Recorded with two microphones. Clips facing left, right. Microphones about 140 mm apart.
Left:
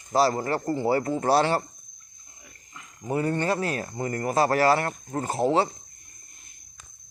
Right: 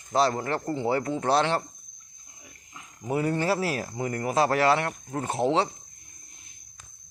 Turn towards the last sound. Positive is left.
turn(degrees=0)  # may be behind; listen again after turning